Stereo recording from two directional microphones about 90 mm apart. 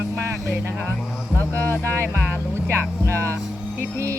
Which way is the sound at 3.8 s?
30° right (ahead or behind).